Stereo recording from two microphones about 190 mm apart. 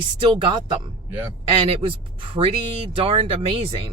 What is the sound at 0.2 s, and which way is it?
Speech, 25° right (ahead or behind).